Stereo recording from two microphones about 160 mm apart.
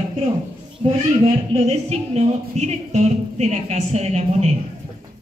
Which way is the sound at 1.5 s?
40° right (ahead or behind).